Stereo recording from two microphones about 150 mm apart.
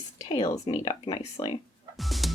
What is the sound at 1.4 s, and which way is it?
Speech, 50° left (ahead or behind).